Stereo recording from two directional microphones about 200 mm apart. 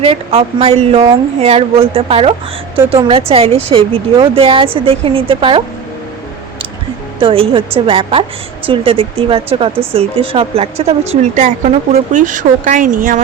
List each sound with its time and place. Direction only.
0.0 s speech: 30° right (ahead or behind)
7.2 s speech: 25° right (ahead or behind)